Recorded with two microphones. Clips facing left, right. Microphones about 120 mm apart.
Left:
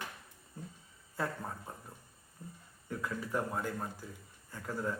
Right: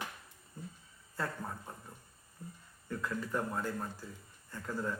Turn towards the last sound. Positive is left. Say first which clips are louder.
# even
turn(degrees=10)  # may be behind; listen again after turning